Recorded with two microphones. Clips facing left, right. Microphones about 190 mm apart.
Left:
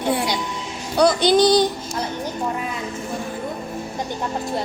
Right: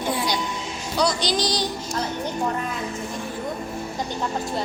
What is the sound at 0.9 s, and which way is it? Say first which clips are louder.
Speech: left 8 dB; 55° left (ahead or behind).